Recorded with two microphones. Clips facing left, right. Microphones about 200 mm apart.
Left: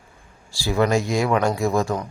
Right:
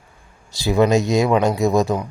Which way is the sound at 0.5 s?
20° right (ahead or behind).